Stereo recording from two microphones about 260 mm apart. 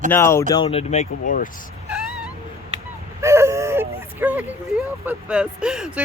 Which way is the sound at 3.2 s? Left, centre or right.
Centre.